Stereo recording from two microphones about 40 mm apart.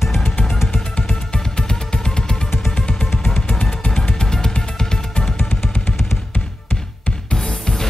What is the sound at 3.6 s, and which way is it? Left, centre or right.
Music, left.